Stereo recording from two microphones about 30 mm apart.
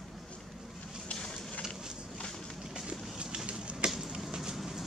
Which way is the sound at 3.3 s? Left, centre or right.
Right.